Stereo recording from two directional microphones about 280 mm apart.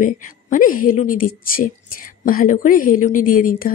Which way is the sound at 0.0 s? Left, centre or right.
Left.